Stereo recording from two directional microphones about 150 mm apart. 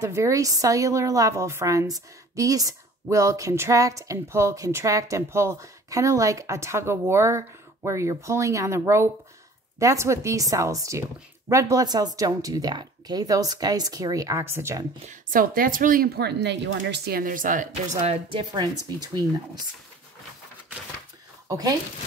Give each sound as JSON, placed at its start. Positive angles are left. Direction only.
{"t": 0.0, "sound": "a woman's voice", "side_deg": -20}
{"t": 15.0, "sound": "a woman's voice", "side_deg": -65}
{"t": 18.4, "sound": "a woman's voice", "side_deg": -25}
{"t": 21.5, "sound": "speech", "side_deg": -25}